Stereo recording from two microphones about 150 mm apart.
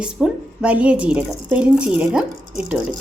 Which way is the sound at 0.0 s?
5° right (ahead or behind).